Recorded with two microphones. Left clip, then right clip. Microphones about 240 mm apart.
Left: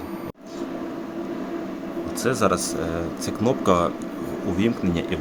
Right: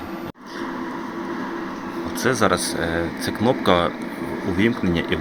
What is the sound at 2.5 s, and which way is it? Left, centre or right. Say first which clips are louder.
Speech: right 3 dB; centre.